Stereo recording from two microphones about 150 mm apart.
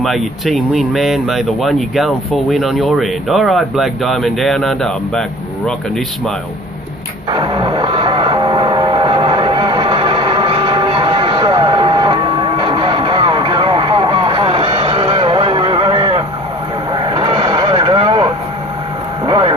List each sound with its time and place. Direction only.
0.0 s speech: centre (ahead or behind)
7.3 s music: 35° right (ahead or behind)
16.9 s vehicle: 35° right (ahead or behind)
19.2 s a sound: 30° right (ahead or behind)